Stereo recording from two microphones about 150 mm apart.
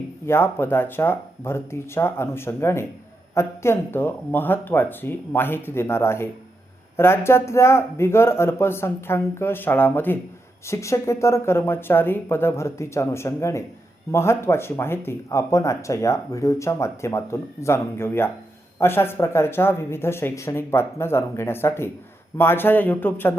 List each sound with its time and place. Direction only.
0.3 s speech: 15° left (ahead or behind)